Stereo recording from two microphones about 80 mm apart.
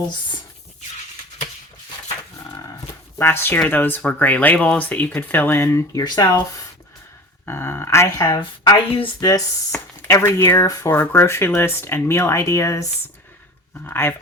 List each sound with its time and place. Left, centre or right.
3.2 s speech: left
5.5 s speech: left
6.0 s a woman's voice: left
7.4 s speech: left
8.2 s a woman's voice: left
9.2 s speech: left
10.0 s speech: left
10.7 s speech: left
10.9 s speech: left
13.8 s speech: left